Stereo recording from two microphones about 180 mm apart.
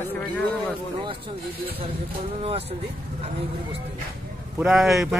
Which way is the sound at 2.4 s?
35° right (ahead or behind).